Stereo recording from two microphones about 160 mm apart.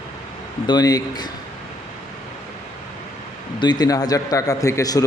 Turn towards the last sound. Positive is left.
turn(degrees=20)  # may be behind; listen again after turning